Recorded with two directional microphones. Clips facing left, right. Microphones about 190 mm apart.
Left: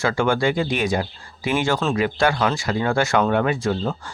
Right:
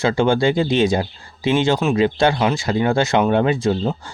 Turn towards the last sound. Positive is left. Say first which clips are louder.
# right 3 dB
turn(degrees=-20)  # may be behind; listen again after turning